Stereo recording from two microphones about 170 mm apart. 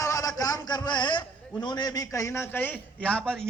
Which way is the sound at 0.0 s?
20° left (ahead or behind).